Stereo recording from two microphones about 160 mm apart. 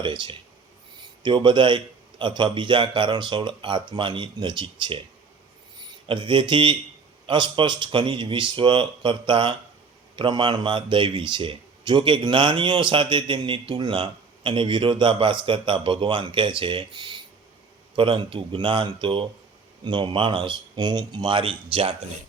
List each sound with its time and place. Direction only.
0.0 s a man's voice: 30° right (ahead or behind)
6.1 s speech: 30° right (ahead or behind)